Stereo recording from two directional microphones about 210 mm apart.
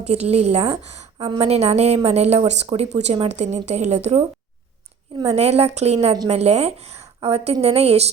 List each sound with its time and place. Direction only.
0.0 s a woman's voice: 30° right (ahead or behind)
5.2 s a woman's voice: 30° right (ahead or behind)